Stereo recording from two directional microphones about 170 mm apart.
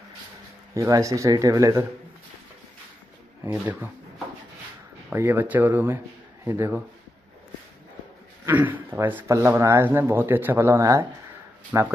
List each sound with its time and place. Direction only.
0.7 s speech: 20° right (ahead or behind)
3.4 s speech: 10° right (ahead or behind)
5.1 s speech: 10° right (ahead or behind)
8.5 s speech: 10° right (ahead or behind)